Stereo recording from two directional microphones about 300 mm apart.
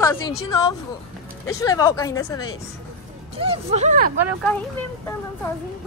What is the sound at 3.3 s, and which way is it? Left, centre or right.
Speech, right.